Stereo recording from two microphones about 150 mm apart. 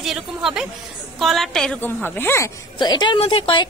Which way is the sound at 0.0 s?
5° right (ahead or behind).